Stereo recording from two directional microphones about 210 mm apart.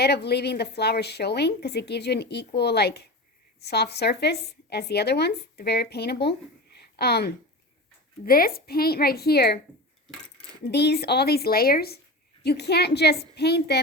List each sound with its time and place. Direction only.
0.0 s a woman's voice: 50° left (ahead or behind)
10.7 s speech: 55° left (ahead or behind)